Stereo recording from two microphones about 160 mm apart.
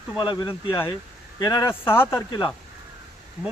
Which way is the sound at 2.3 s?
30° left (ahead or behind).